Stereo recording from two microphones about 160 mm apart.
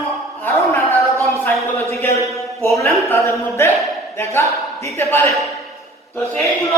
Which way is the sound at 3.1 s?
15° left (ahead or behind).